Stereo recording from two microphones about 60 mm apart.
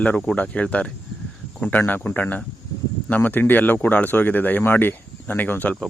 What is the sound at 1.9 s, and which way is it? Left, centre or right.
Speech, left.